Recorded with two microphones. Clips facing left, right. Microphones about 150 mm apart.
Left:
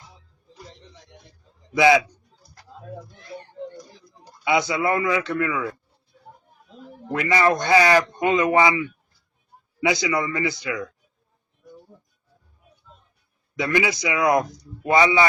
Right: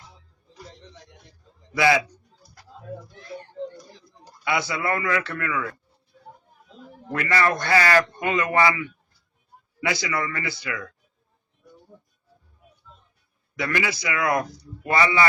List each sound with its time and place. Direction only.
1.7 s a man's voice: 20° left (ahead or behind)
4.4 s a man's voice: 20° left (ahead or behind)
7.1 s a man's voice: 20° left (ahead or behind)
13.6 s a man's voice: 20° left (ahead or behind)